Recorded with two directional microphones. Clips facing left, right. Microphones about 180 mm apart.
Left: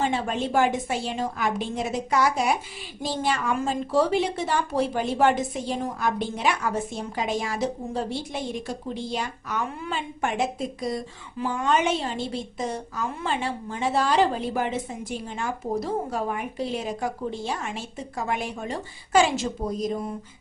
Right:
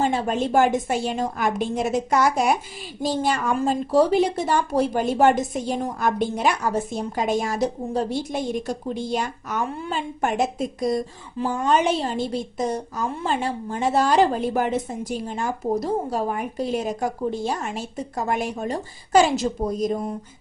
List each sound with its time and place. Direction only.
0.0 s a woman's voice: 45° right (ahead or behind)